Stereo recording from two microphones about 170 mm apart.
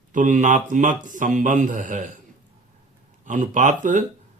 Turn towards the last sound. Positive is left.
turn(degrees=-50)  # may be behind; listen again after turning